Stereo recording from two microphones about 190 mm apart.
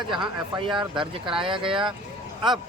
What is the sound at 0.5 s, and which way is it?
Speech, 25° right (ahead or behind).